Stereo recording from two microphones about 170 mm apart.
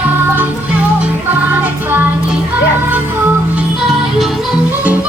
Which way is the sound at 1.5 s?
10° right (ahead or behind).